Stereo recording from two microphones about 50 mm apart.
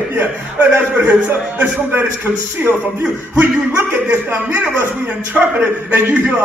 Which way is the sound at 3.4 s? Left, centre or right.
Right.